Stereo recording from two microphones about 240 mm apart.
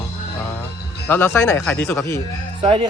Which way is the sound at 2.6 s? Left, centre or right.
Centre.